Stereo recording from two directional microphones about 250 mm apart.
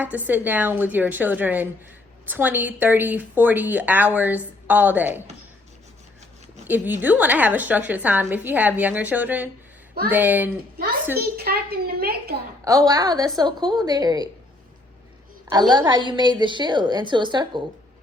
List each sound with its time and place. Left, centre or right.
0.0 s a woman's voice: centre
6.7 s a woman's voice: centre
11.2 s a woman's voice: right
12.6 s a woman's voice: centre
15.4 s a woman's voice: centre